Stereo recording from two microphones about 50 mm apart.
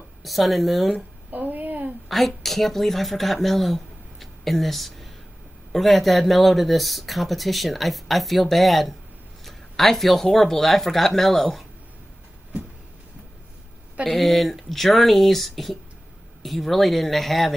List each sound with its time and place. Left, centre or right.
0.2 s speech: centre
0.9 s a sound: right
2.0 s speech: centre
14.0 s speech: centre